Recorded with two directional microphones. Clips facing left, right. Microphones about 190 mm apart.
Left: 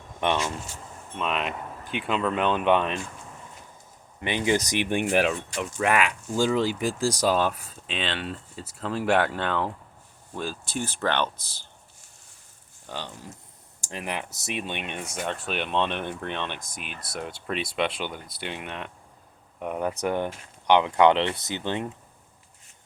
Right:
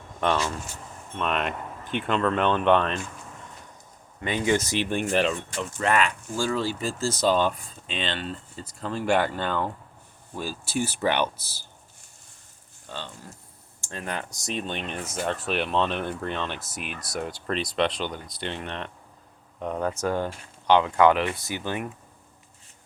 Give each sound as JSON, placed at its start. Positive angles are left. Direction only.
{"t": 0.2, "sound": "speech", "side_deg": 15}
{"t": 1.1, "sound": "speech", "side_deg": 5}
{"t": 4.6, "sound": "speech", "side_deg": 15}
{"t": 13.8, "sound": "speech", "side_deg": 10}